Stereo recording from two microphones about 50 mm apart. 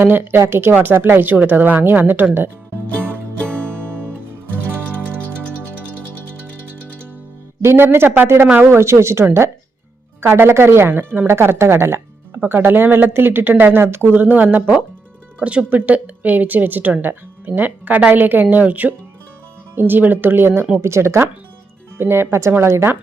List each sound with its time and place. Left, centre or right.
0.0 s speech: right
0.7 s speech: right
3.5 s music: right
7.6 s speech: right
8.5 s speech: right
10.2 s speech: right
12.5 s speech: right
13.8 s speech: right
14.1 s speech: right
15.4 s speech: right
20.8 s speech: right
21.9 s speech: right